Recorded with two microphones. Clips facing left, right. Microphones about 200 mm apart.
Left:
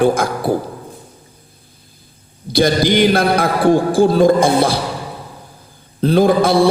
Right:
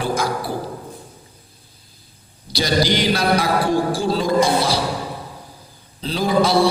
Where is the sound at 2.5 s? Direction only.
55° left (ahead or behind).